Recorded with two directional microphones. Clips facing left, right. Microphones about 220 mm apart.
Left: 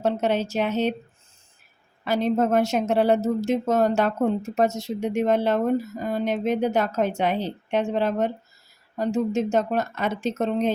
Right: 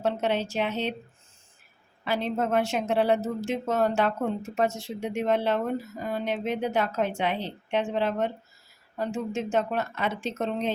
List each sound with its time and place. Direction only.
0.0 s speech: 45° left (ahead or behind)
2.0 s speech: 45° left (ahead or behind)